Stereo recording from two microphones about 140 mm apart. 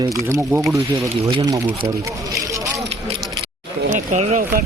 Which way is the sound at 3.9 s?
55° right (ahead or behind).